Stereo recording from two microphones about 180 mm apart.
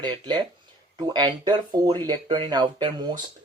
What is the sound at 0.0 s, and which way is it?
Speech, 25° right (ahead or behind).